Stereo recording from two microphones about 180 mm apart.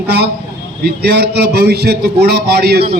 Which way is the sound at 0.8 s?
65° right (ahead or behind).